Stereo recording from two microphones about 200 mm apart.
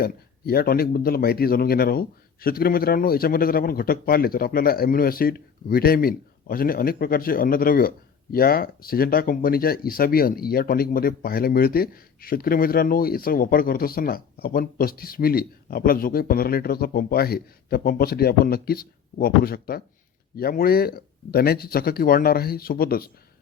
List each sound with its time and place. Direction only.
0.0 s a man's voice: 50° left (ahead or behind)